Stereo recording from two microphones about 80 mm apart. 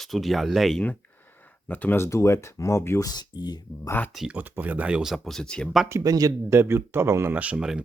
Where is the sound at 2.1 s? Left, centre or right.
Left.